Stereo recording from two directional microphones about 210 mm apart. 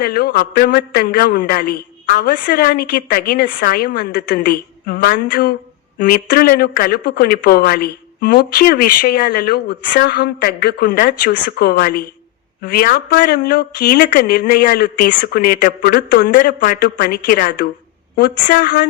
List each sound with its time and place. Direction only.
0.0 s speech: 45° left (ahead or behind)